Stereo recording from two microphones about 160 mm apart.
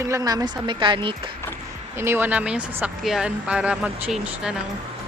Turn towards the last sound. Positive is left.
turn(degrees=-5)  # may be behind; listen again after turning